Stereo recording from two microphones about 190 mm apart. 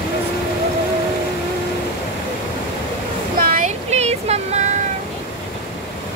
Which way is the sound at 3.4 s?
45° right (ahead or behind).